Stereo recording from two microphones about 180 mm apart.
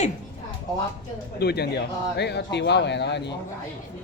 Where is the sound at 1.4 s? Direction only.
65° left (ahead or behind).